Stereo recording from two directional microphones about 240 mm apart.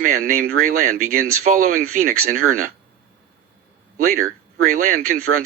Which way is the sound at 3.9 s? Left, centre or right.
Right.